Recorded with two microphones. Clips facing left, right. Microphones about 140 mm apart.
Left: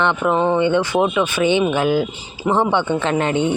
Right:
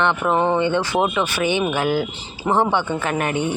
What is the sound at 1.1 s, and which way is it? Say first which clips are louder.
A woman's voice: left 4 dB; 20° left (ahead or behind).